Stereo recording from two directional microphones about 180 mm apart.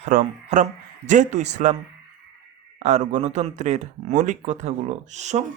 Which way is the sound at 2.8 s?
40° right (ahead or behind).